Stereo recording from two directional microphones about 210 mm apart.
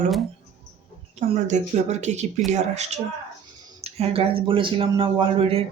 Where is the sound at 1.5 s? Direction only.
35° right (ahead or behind).